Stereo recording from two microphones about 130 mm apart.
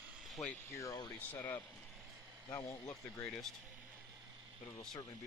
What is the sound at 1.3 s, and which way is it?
Speech, 15° left (ahead or behind).